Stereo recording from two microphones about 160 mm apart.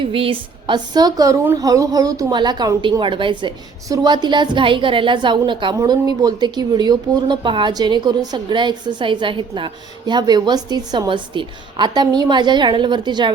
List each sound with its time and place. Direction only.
0.0 s speech: 35° right (ahead or behind)